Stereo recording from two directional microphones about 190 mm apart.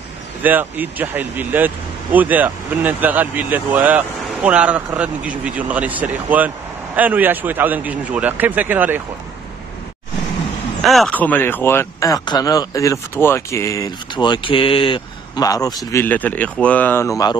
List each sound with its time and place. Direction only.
0.4 s speech: 10° right (ahead or behind)
10.8 s speech: centre (ahead or behind); by 17.4 s 20° left (ahead or behind)